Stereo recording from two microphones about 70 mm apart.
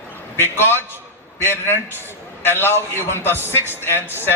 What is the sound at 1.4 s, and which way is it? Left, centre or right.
A man's voice, left.